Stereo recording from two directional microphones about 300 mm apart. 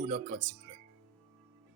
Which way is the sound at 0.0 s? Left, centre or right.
Right.